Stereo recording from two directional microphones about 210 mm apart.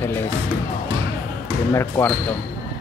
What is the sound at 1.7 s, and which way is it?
Speech, 10° left (ahead or behind).